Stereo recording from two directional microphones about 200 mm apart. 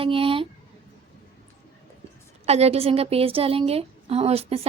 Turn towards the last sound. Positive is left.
turn(degrees=-30)  # may be behind; listen again after turning